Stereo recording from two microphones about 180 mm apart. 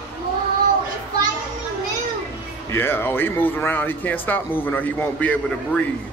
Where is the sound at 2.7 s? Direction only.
10° left (ahead or behind).